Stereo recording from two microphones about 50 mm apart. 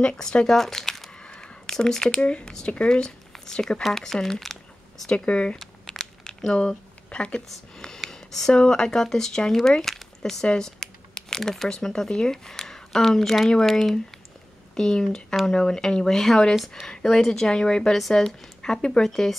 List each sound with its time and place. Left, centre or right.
0.2 s speech: centre
0.6 s crumpling: centre
1.2 s a sound: centre
2.0 s speech: left; by 5.1 s centre
5.1 s speech: left
5.6 s crumpling: centre
6.2 s a sound: centre
7.4 s speech: centre